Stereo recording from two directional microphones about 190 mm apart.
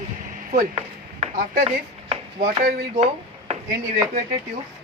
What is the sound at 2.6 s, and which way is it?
Speech, 35° right (ahead or behind).